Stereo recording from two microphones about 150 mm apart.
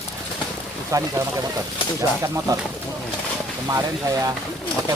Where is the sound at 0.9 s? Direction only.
20° right (ahead or behind).